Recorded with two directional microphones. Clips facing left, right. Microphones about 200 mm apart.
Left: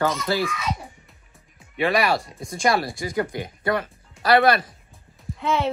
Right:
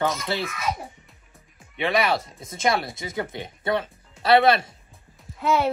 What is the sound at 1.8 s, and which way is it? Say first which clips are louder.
Speech: left 2 dB; centre (ahead or behind).